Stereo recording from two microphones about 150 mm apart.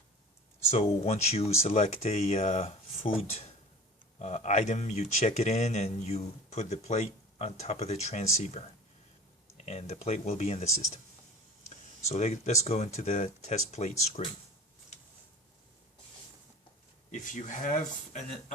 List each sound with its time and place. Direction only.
0.7 s speech: 45° left (ahead or behind)
4.2 s speech: 50° left (ahead or behind)
12.0 s speech: 45° left (ahead or behind)
17.1 s speech: 55° left (ahead or behind)